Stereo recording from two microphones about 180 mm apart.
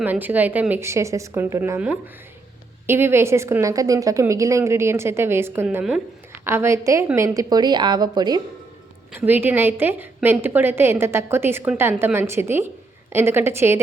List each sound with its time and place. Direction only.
0.0 s a woman's voice: 10° right (ahead or behind)
6.4 s a woman's voice: 15° right (ahead or behind)
9.1 s a woman's voice: 10° right (ahead or behind)